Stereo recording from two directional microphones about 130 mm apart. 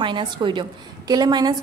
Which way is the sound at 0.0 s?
40° right (ahead or behind).